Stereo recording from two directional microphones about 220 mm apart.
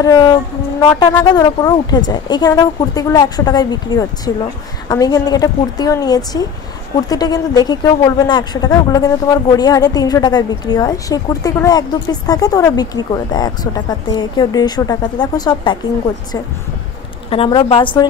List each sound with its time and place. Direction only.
0.0 s speech: 20° left (ahead or behind)
17.3 s a woman's voice: 25° left (ahead or behind)